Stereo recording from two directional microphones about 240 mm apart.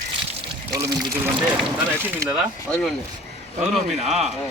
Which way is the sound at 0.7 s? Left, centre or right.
Centre.